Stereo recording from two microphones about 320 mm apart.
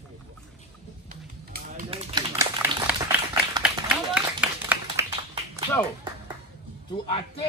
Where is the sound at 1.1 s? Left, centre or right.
Right.